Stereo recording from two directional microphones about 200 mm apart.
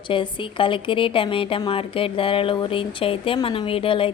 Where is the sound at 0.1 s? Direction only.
25° left (ahead or behind).